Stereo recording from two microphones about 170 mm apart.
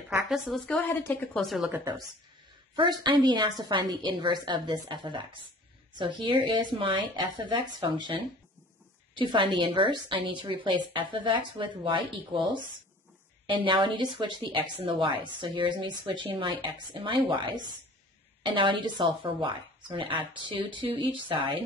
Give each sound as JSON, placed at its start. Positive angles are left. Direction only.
{"t": 0.1, "sound": "a woman's voice", "side_deg": 0}
{"t": 1.7, "sound": "a woman's voice", "side_deg": -20}